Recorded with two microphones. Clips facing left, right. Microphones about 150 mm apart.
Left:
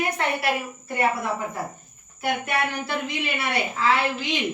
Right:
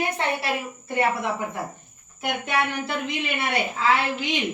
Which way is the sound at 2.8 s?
20° right (ahead or behind).